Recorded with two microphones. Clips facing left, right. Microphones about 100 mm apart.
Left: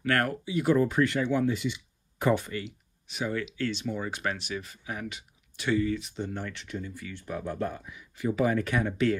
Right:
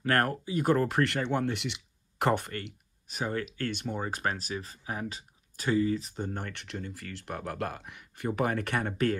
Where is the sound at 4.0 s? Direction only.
40° right (ahead or behind).